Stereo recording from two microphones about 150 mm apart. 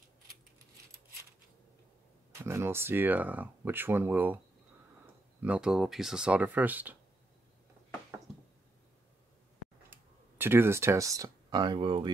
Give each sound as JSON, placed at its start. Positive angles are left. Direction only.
{"t": 2.3, "sound": "speech", "side_deg": -15}
{"t": 5.4, "sound": "speech", "side_deg": -5}
{"t": 9.8, "sound": "speech", "side_deg": -15}